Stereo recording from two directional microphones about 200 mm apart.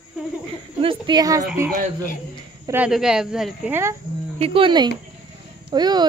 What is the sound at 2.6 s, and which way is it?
Speech, 10° right (ahead or behind).